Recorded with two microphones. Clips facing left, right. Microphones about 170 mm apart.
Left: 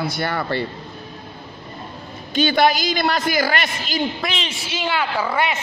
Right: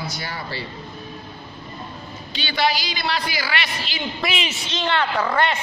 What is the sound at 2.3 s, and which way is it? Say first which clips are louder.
A woman's voice: left 6 dB; 50° left (ahead or behind).